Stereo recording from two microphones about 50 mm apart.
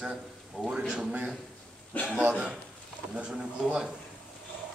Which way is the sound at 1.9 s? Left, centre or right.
Left.